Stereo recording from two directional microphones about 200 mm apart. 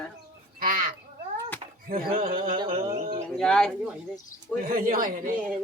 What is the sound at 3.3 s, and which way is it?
Speech, 5° left (ahead or behind).